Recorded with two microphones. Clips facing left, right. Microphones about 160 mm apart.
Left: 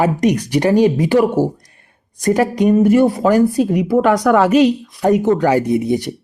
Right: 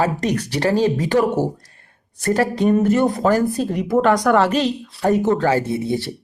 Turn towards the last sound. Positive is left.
turn(degrees=15)  # may be behind; listen again after turning